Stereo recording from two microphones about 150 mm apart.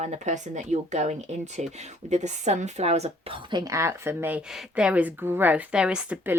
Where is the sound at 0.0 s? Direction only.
50° right (ahead or behind); by 3.6 s 35° right (ahead or behind).